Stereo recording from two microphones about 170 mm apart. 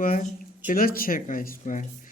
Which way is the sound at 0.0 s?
55° left (ahead or behind).